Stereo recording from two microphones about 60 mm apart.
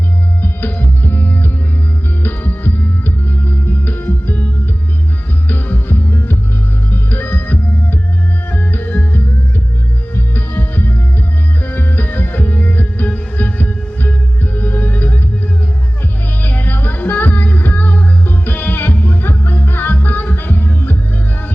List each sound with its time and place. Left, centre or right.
0.4 s music: left
5.5 s music: left
16.4 s music: left
19.6 s music: left